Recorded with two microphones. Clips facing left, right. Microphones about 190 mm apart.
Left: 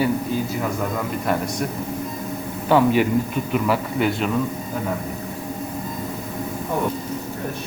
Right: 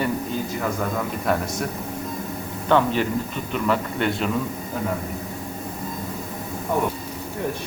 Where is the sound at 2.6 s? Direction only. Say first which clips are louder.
Left 3 dB; 10° left (ahead or behind).